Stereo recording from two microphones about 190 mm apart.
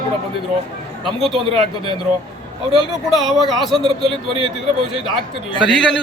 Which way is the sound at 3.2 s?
Centre (ahead or behind).